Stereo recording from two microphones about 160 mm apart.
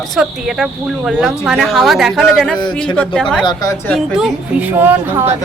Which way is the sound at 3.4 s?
20° left (ahead or behind).